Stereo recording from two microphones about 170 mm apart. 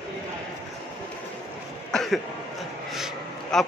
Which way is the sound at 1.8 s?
Centre (ahead or behind).